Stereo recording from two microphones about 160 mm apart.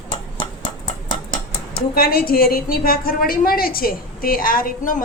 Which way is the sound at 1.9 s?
70° left (ahead or behind).